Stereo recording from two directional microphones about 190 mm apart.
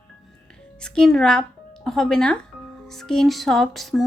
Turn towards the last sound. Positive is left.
turn(degrees=0)  # may be behind; listen again after turning